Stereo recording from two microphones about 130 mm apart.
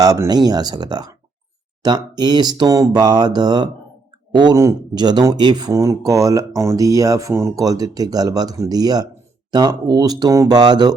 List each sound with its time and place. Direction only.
0.0 s speech: 30° right (ahead or behind)